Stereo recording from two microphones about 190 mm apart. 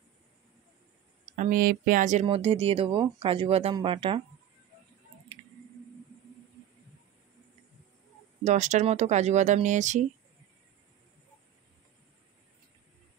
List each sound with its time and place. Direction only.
1.2 s speech: 40° right (ahead or behind)
2.2 s speech: 30° right (ahead or behind)
8.5 s speech: 40° right (ahead or behind)